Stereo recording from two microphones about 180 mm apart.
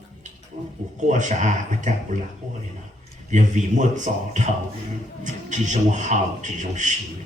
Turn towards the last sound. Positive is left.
turn(degrees=-45)  # may be behind; listen again after turning